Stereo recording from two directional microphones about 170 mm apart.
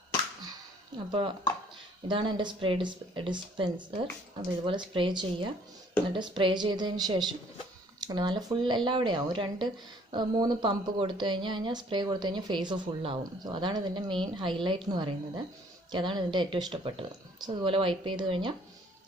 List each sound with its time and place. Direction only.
2.0 s a woman's voice: 30° right (ahead or behind)